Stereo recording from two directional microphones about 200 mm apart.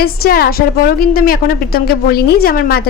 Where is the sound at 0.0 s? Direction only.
50° left (ahead or behind).